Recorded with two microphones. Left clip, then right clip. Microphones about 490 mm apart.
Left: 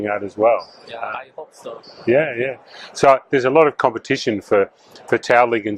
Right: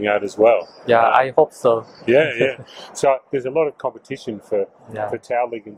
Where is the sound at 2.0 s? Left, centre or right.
Centre.